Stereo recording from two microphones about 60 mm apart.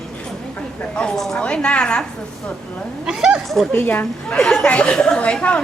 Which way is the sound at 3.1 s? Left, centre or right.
Centre.